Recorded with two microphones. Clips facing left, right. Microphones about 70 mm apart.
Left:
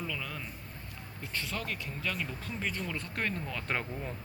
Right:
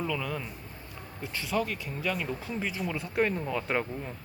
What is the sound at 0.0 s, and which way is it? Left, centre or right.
Speech, centre.